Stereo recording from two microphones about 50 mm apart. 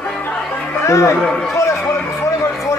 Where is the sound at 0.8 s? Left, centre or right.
Left.